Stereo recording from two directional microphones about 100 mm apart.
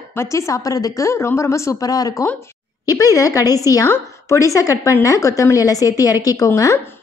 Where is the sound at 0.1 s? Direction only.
30° left (ahead or behind).